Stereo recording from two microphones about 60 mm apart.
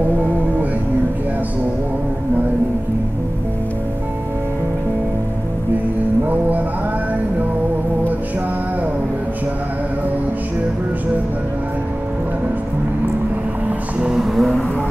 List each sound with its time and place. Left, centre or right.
6.2 s vehicle: right
13.7 s music: centre
14.2 s vehicle: centre